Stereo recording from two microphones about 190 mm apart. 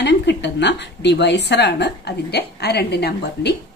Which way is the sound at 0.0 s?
65° left (ahead or behind).